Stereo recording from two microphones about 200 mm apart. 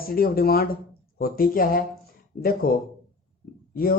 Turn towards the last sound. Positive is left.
turn(degrees=45)  # may be behind; listen again after turning